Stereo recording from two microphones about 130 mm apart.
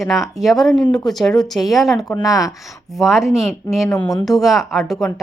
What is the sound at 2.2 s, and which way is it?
Speech, 25° left (ahead or behind).